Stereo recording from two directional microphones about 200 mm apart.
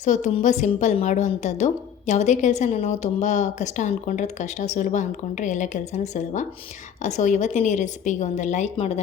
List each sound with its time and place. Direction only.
0.0 s a woman's voice: 35° left (ahead or behind)